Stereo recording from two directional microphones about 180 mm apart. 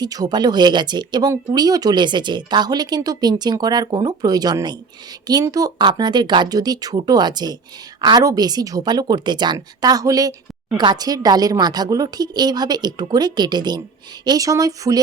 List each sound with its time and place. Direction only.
0.0 s speech: 20° right (ahead or behind)